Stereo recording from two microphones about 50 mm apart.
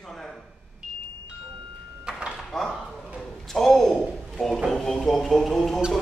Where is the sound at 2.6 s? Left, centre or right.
Centre.